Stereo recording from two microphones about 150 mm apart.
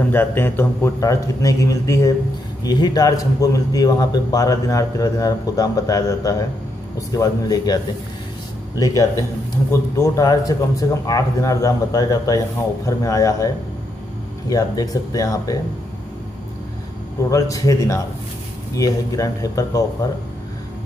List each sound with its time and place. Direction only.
0.1 s a man's voice: 15° left (ahead or behind)
14.5 s a man's voice: 25° left (ahead or behind)
17.3 s a man's voice: 20° left (ahead or behind)